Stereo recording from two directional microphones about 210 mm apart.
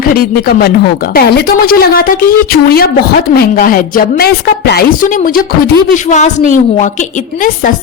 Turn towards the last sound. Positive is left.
turn(degrees=35)  # may be behind; listen again after turning